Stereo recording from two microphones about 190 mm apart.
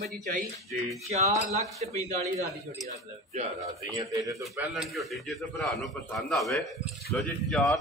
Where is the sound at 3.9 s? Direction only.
15° right (ahead or behind).